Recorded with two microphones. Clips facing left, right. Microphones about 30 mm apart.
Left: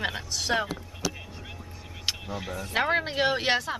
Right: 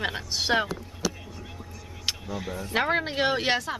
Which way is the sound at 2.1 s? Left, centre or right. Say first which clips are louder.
Even; centre.